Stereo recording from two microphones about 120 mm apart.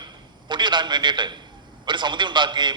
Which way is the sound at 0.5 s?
40° right (ahead or behind).